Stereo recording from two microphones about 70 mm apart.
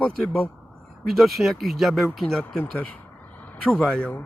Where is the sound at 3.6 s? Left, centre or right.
Centre.